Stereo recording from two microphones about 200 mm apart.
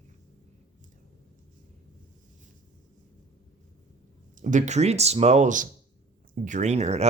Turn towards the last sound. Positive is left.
turn(degrees=-35)  # may be behind; listen again after turning